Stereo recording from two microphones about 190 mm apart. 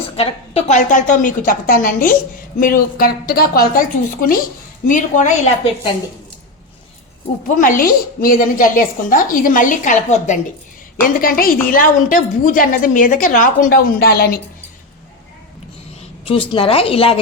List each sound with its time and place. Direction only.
0.2 s a woman's voice: 35° left (ahead or behind)
7.4 s a woman's voice: 45° left (ahead or behind)
16.0 s a woman's voice: 30° left (ahead or behind)